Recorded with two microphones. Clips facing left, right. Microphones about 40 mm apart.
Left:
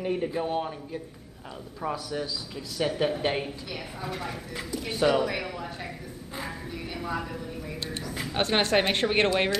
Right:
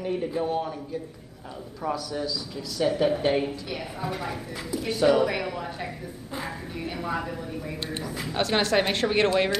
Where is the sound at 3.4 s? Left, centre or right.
Centre.